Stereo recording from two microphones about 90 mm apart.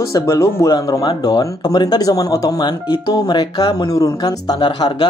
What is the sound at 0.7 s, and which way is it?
Speech, 50° left (ahead or behind).